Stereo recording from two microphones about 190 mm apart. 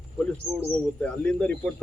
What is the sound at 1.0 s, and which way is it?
Speech, 5° left (ahead or behind).